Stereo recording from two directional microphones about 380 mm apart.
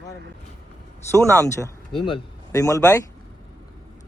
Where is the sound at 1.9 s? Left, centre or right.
Centre.